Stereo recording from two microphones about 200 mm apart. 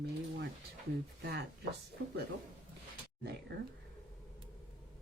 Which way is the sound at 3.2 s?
55° right (ahead or behind).